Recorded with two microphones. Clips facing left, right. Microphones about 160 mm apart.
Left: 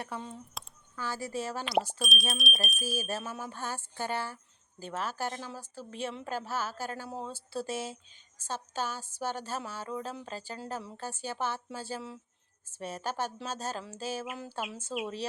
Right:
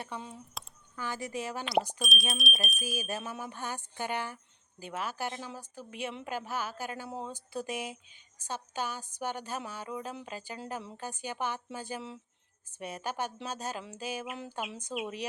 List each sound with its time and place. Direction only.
0.1 s speech: 5° right (ahead or behind)
2.0 s speech: centre (ahead or behind)
3.1 s a woman's voice: 15° right (ahead or behind)